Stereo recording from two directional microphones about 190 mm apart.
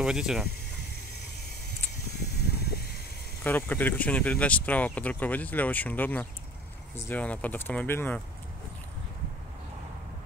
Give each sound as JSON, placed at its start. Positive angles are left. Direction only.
{"t": 0.0, "sound": "speech", "side_deg": -5}
{"t": 2.6, "sound": "a sound", "side_deg": 55}
{"t": 3.4, "sound": "speech", "side_deg": 10}